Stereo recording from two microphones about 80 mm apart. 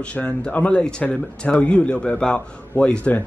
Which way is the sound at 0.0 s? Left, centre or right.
Centre.